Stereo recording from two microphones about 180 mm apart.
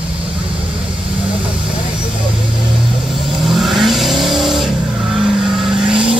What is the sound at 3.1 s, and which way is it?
Vehicle, centre (ahead or behind).